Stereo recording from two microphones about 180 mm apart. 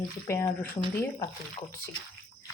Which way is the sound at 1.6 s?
30° left (ahead or behind).